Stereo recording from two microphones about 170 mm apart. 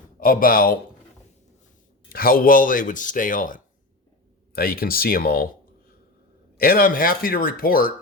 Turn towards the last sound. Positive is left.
turn(degrees=60)  # may be behind; listen again after turning